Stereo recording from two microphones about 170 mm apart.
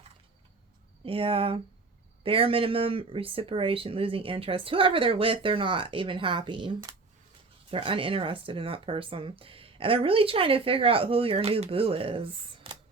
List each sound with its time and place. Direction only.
1.0 s speech: 30° right (ahead or behind)